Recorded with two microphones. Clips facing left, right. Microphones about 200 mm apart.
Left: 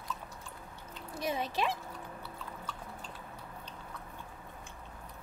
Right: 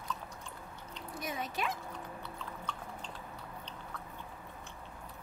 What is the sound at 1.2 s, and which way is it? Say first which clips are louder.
Speech: left 5 dB; 30° left (ahead or behind).